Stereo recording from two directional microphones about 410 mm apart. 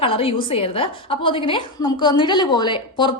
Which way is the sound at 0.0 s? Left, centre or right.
Centre.